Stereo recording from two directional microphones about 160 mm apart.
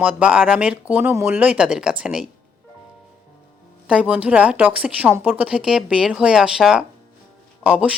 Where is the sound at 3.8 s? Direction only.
5° right (ahead or behind).